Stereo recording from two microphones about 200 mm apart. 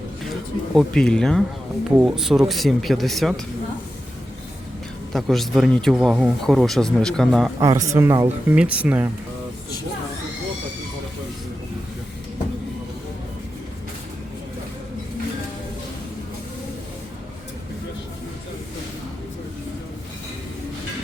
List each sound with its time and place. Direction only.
0.7 s speech: centre (ahead or behind)
5.1 s speech: centre (ahead or behind)
7.6 s speech: 15° right (ahead or behind)